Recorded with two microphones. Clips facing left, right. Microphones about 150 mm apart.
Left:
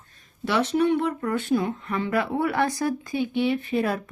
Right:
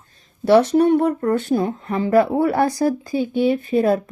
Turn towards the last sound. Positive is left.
turn(degrees=-35)  # may be behind; listen again after turning